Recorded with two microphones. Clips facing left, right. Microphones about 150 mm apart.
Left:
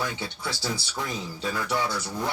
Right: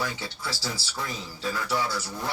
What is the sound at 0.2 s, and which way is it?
Speech, 20° left (ahead or behind).